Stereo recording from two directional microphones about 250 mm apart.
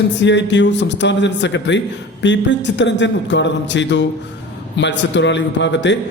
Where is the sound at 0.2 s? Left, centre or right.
Left.